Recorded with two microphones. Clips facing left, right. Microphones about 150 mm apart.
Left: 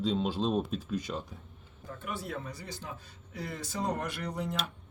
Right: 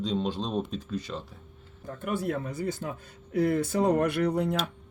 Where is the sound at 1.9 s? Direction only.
50° right (ahead or behind).